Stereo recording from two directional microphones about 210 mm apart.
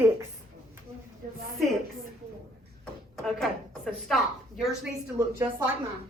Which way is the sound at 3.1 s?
Centre (ahead or behind).